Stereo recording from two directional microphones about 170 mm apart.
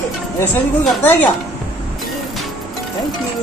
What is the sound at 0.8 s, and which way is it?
Speech, 10° left (ahead or behind).